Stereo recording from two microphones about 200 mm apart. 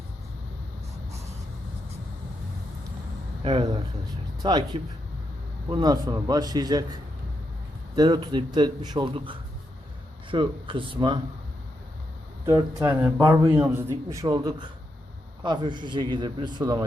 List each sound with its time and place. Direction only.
4.4 s a man's voice: 20° right (ahead or behind)
7.9 s a man's voice: 20° right (ahead or behind)
12.5 s a man's voice: 10° right (ahead or behind)